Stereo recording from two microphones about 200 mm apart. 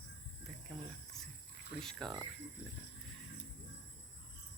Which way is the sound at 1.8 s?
Centre (ahead or behind).